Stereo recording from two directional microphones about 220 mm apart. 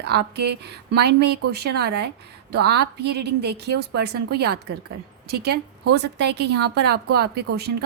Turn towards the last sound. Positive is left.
turn(degrees=-45)  # may be behind; listen again after turning